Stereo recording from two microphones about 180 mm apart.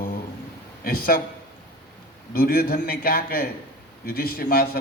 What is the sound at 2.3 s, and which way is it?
A man's voice, 55° left (ahead or behind).